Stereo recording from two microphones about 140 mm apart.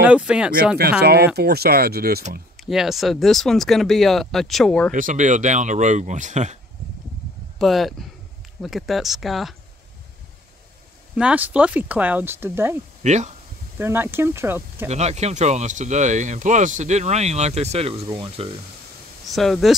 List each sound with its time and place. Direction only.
0.0 s speech: 10° right (ahead or behind)
1.4 s speech: 90° right
2.6 s speech: centre (ahead or behind)
4.9 s speech: 65° right (ahead or behind)
7.5 s speech: centre (ahead or behind)
11.1 s speech: 10° right (ahead or behind)
13.0 s speech: 55° right (ahead or behind)
13.7 s speech: 15° right (ahead or behind)
14.9 s speech: 55° right (ahead or behind)
18.0 s speech: 30° right (ahead or behind)
19.3 s speech: centre (ahead or behind)